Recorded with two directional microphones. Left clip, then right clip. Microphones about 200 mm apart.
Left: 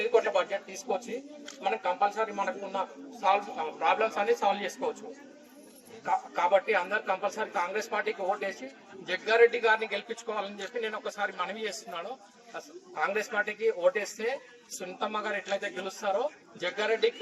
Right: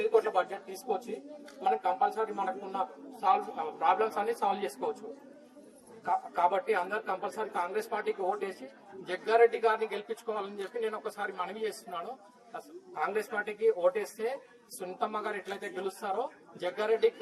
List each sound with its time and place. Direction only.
0.0 s a sound: 65° right (ahead or behind)
1.6 s a man's voice: 60° right (ahead or behind)
6.1 s a man's voice: 60° right (ahead or behind)